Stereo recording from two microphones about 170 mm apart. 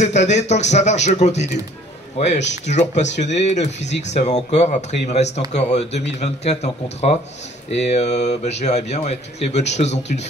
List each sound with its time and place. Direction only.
0.0 s a man's voice: 45° left (ahead or behind)